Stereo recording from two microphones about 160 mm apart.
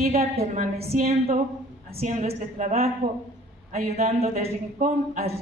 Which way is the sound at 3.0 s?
65° right (ahead or behind).